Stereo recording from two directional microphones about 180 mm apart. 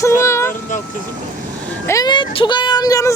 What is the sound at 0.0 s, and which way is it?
Vehicle, 15° left (ahead or behind).